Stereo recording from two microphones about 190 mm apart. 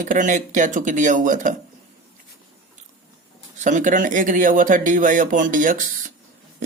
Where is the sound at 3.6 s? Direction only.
40° right (ahead or behind).